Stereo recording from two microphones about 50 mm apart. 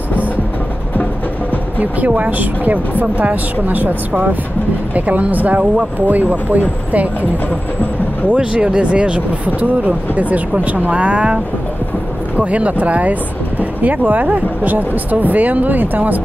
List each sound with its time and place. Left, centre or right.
1.8 s speech: right
8.3 s speech: right
12.4 s speech: right